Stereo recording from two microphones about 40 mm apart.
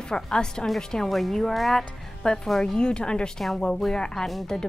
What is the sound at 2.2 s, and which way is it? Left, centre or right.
A woman's voice, centre.